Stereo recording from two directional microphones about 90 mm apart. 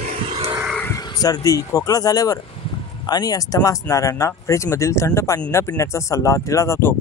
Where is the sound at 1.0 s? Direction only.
45° left (ahead or behind).